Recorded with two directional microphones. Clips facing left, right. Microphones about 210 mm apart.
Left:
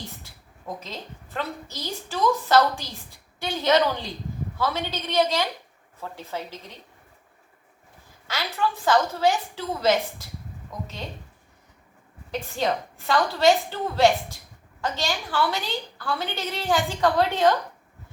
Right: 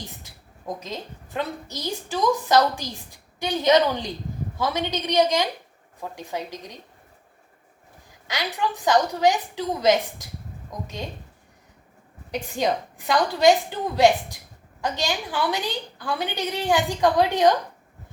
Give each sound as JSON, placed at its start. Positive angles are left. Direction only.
{"t": 0.8, "sound": "a woman's voice", "side_deg": -15}
{"t": 8.3, "sound": "a woman's voice", "side_deg": -15}
{"t": 12.3, "sound": "a woman's voice", "side_deg": -15}